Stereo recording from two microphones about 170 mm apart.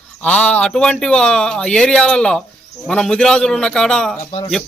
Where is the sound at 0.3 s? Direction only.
5° left (ahead or behind).